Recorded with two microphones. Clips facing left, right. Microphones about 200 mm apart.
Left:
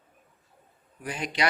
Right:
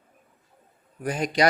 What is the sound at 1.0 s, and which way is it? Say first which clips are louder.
Speech: right 7 dB; 45° right (ahead or behind).